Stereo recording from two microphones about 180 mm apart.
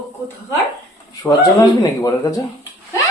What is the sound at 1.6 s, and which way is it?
Speech, 15° left (ahead or behind).